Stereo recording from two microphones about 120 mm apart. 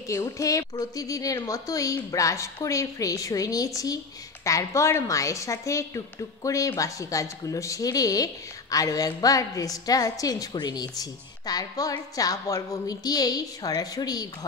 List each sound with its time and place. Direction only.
0.1 s a woman's voice: 25° left (ahead or behind)